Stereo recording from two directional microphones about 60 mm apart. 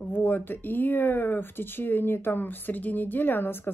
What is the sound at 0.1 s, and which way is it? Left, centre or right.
Speech, left.